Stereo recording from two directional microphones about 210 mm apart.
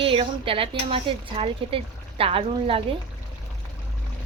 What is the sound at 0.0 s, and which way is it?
Speech, 25° right (ahead or behind).